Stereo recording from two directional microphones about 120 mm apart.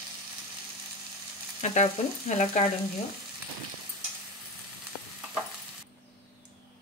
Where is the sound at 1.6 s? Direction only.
75° left (ahead or behind).